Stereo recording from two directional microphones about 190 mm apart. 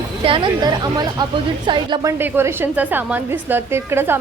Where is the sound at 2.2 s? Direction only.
10° right (ahead or behind).